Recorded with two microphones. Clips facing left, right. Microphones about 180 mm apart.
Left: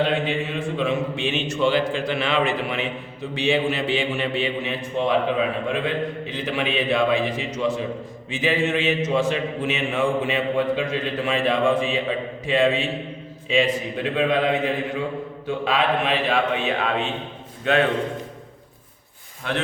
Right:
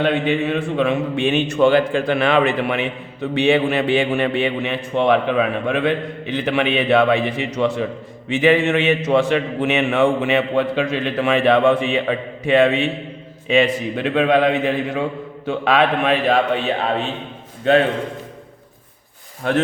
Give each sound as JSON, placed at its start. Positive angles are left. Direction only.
{"t": 0.0, "sound": "a man's voice", "side_deg": -65}
{"t": 15.4, "sound": "a man's voice", "side_deg": -70}
{"t": 16.1, "sound": "a man's voice", "side_deg": -40}
{"t": 19.4, "sound": "speech", "side_deg": -45}